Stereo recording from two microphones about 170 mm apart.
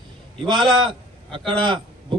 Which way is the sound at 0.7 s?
25° right (ahead or behind).